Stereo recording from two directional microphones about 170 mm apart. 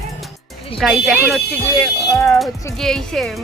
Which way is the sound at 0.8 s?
Centre (ahead or behind).